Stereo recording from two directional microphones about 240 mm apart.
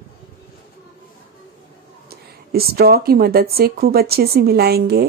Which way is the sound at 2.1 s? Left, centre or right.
Right.